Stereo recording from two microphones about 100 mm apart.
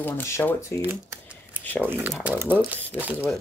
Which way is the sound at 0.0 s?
25° left (ahead or behind).